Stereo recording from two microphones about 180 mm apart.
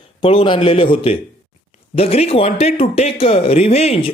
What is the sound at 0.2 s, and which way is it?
Speech, 30° left (ahead or behind).